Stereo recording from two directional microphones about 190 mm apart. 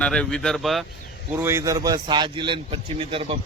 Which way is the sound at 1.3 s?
10° right (ahead or behind).